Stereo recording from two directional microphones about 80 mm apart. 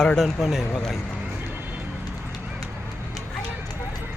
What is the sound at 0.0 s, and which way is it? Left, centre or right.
Speech, centre.